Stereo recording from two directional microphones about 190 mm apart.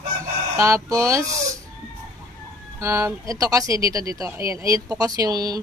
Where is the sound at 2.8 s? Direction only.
15° right (ahead or behind).